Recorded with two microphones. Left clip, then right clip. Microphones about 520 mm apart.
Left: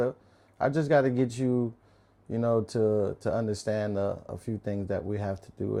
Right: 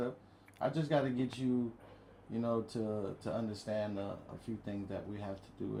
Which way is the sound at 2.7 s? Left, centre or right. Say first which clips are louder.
Left 13 dB; left.